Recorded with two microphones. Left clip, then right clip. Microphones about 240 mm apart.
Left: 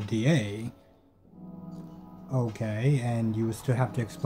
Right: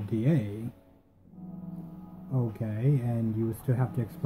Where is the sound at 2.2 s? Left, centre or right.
Centre.